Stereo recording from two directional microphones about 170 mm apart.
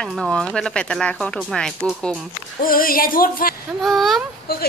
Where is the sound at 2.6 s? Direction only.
55° left (ahead or behind).